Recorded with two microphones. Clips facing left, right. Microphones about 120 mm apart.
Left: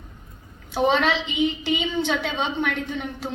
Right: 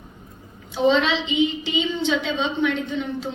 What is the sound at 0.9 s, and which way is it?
A man's voice, 50° left (ahead or behind).